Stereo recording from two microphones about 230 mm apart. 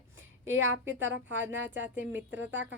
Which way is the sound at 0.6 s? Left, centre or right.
Right.